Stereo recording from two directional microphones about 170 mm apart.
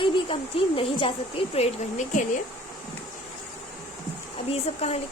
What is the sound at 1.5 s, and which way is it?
Speech, 40° left (ahead or behind).